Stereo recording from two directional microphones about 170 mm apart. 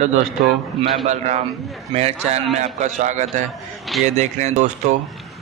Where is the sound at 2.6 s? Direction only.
45° right (ahead or behind).